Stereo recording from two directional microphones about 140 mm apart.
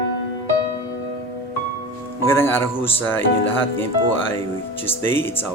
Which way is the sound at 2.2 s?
15° left (ahead or behind).